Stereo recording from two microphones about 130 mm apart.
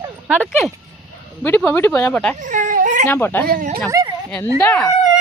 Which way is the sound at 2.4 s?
80° right.